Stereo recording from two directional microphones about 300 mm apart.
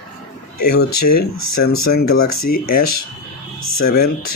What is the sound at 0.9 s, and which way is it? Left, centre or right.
Speech, left.